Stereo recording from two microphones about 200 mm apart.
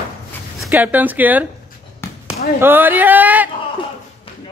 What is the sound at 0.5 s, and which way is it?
Speech, 5° right (ahead or behind).